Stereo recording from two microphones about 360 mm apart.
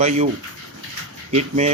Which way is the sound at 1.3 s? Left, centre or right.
Centre.